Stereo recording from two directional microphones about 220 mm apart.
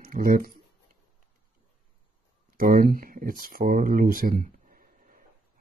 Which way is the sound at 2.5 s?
40° right (ahead or behind).